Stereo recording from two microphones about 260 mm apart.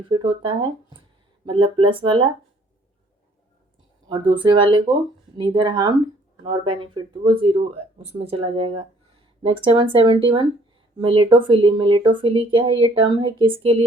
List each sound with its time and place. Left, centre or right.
0.1 s speech: centre
4.1 s speech: centre